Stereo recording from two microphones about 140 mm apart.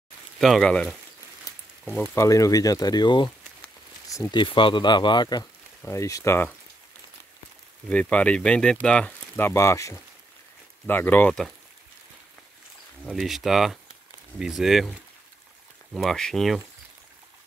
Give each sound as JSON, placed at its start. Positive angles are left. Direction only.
{"t": 0.4, "sound": "speech", "side_deg": 5}
{"t": 2.1, "sound": "speech", "side_deg": 25}
{"t": 3.6, "sound": "a sound", "side_deg": 20}
{"t": 4.3, "sound": "speech", "side_deg": 35}
{"t": 5.8, "sound": "speech", "side_deg": 20}
{"t": 7.9, "sound": "speech", "side_deg": 10}
{"t": 9.5, "sound": "speech", "side_deg": 20}
{"t": 13.0, "sound": "speech", "side_deg": 0}